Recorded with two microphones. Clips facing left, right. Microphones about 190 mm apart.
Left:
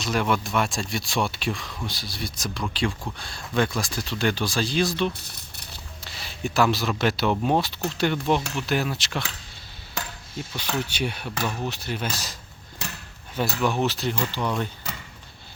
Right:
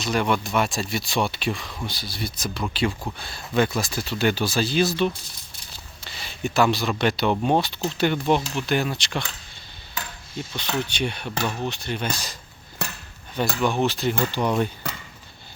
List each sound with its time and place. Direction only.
0.0 s speech: centre (ahead or behind)
5.1 s rattle: 65° left (ahead or behind)
6.1 s speech: centre (ahead or behind)
10.3 s speech: 5° left (ahead or behind)
12.8 s a sound: 60° right (ahead or behind)
13.3 s speech: centre (ahead or behind)
14.3 s speech: 15° right (ahead or behind)